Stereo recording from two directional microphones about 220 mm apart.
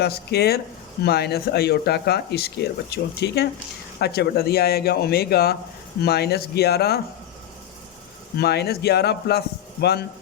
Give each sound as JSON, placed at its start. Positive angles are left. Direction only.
{"t": 0.0, "sound": "speech", "side_deg": 45}
{"t": 8.4, "sound": "speech", "side_deg": 45}